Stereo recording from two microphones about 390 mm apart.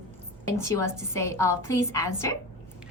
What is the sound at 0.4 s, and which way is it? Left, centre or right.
A woman's voice, centre.